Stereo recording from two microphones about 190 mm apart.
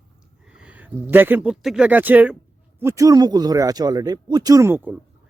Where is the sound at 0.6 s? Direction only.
10° right (ahead or behind).